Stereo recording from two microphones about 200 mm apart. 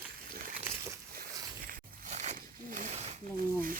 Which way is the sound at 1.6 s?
35° right (ahead or behind).